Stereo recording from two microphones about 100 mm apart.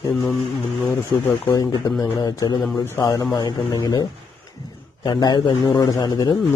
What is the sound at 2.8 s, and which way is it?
Speech, 25° left (ahead or behind).